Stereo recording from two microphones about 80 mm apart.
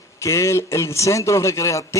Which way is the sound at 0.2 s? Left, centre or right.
Left.